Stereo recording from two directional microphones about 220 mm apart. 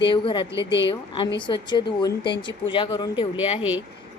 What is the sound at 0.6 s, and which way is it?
Speech, 50° left (ahead or behind).